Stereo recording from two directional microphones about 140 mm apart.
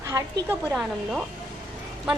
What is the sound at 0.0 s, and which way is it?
Speech, 25° right (ahead or behind).